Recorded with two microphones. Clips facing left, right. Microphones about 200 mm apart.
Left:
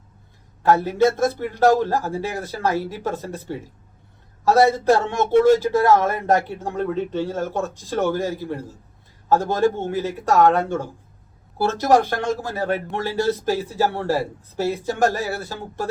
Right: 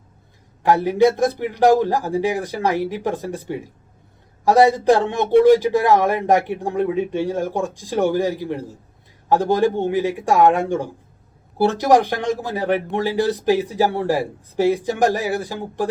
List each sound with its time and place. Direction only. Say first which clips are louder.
0.6 s speech: right 2 dB; 15° right (ahead or behind)